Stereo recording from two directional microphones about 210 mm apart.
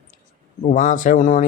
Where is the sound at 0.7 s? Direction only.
35° left (ahead or behind).